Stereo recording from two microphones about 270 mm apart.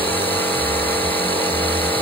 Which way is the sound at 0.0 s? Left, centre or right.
Centre.